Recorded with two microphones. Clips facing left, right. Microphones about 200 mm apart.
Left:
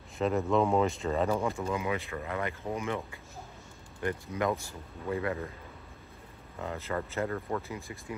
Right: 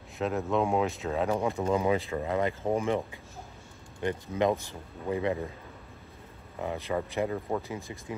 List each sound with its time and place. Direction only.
0.2 s speech: centre (ahead or behind)
1.6 s speech: 35° right (ahead or behind)
4.0 s speech: 20° right (ahead or behind)
6.6 s speech: 15° right (ahead or behind)